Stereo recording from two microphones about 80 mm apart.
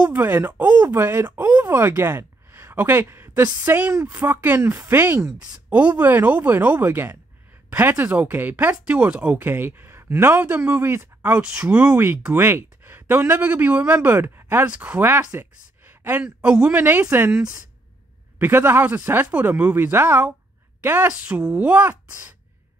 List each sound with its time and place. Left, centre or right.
0.0 s speech: right
5.4 s speech: centre
16.3 s speech: centre
16.7 s speech: right
18.4 s speech: right
21.1 s speech: centre